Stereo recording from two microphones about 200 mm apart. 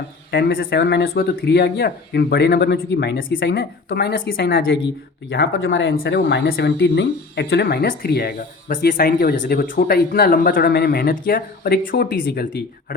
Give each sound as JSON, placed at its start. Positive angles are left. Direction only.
{"t": 0.3, "sound": "speech", "side_deg": 50}